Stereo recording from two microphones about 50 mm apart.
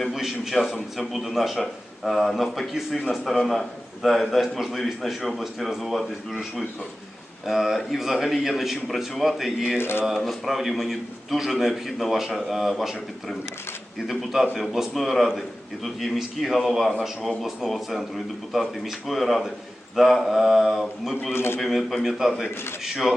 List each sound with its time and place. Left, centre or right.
0.1 s a man's voice: centre
7.4 s a man's voice: centre
9.7 s speech: left
10.1 s a man's voice: centre
21.3 s a man's voice: left
21.6 s a man's voice: centre